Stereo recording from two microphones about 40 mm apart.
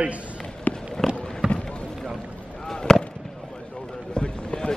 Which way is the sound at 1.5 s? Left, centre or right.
Left.